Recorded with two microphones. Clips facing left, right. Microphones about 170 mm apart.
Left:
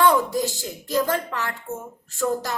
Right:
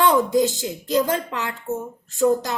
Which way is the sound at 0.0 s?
20° right (ahead or behind).